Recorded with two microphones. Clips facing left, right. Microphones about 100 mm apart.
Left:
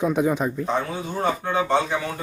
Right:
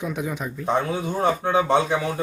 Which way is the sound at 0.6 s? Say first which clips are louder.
Right 2 dB; 20° right (ahead or behind).